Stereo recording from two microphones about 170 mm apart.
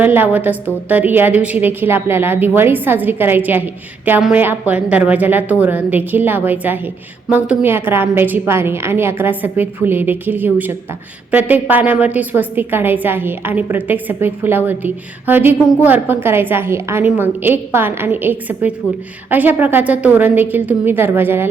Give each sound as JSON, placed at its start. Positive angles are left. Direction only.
{"t": 0.0, "sound": "a woman's voice", "side_deg": -10}